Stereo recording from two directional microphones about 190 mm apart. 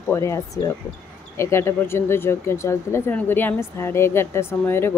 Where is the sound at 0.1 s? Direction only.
15° left (ahead or behind).